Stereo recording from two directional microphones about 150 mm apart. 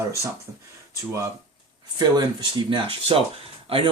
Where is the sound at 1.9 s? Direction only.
30° right (ahead or behind).